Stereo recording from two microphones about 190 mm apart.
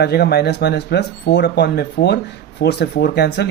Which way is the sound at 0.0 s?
60° left (ahead or behind).